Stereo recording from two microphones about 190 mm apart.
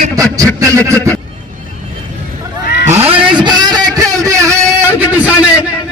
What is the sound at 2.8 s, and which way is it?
Cat, 35° right (ahead or behind).